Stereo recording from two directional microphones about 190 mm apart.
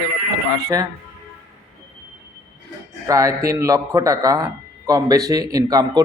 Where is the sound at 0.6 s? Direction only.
20° right (ahead or behind).